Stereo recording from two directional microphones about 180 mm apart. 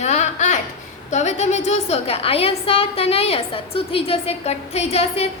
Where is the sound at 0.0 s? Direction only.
40° left (ahead or behind).